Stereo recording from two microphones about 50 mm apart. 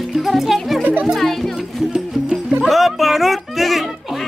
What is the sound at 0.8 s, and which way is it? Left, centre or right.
Music, right.